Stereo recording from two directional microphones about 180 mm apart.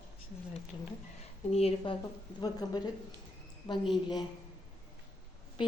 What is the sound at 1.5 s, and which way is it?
Speech, 35° left (ahead or behind).